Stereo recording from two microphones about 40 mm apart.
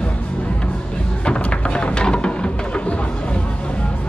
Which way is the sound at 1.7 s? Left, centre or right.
Left.